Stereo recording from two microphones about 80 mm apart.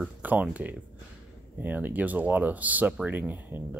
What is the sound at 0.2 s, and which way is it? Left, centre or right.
Speech, centre.